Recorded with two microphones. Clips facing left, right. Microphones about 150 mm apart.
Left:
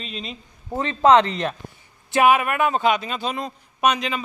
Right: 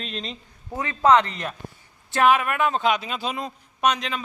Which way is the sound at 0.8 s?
30° left (ahead or behind).